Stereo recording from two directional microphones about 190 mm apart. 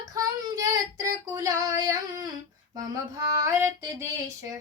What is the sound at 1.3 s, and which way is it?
Female singing, 15° right (ahead or behind).